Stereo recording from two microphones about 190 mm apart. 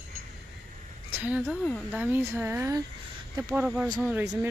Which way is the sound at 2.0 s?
10° right (ahead or behind).